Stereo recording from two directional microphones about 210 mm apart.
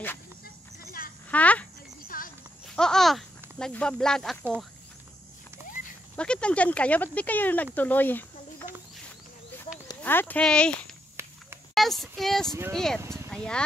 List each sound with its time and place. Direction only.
1.3 s speech: 5° left (ahead or behind)
2.0 s horse: 40° left (ahead or behind)
2.7 s a sound: 5° left (ahead or behind)
6.1 s speech: 5° left (ahead or behind)
9.8 s speech: 10° left (ahead or behind)
11.7 s child singing: centre (ahead or behind)
12.7 s speech: centre (ahead or behind)
13.0 s a sound: 15° right (ahead or behind)
13.3 s speech: 5° left (ahead or behind)